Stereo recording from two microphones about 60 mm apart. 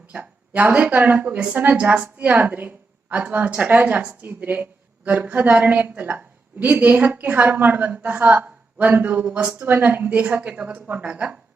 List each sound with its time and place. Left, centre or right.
0.1 s speech: right